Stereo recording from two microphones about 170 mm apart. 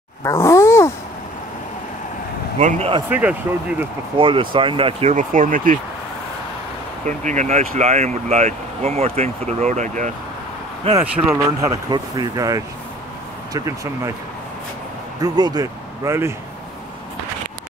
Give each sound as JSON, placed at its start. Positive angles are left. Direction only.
{"t": 0.2, "sound": "grunt", "side_deg": 15}
{"t": 2.6, "sound": "speech", "side_deg": -35}
{"t": 3.1, "sound": "speech", "side_deg": -10}
{"t": 4.2, "sound": "speech", "side_deg": -30}
{"t": 5.1, "sound": "speech", "side_deg": -50}
{"t": 7.1, "sound": "speech", "side_deg": -45}
{"t": 11.0, "sound": "speech", "side_deg": -20}
{"t": 15.2, "sound": "speech", "side_deg": -25}